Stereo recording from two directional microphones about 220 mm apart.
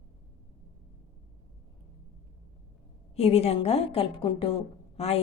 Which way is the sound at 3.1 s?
25° left (ahead or behind).